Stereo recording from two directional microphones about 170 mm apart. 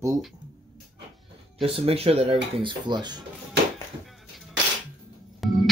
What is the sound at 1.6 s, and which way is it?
Speech, 35° right (ahead or behind).